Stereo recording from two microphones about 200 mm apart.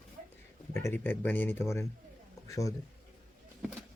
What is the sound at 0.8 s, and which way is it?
Speech, 10° left (ahead or behind).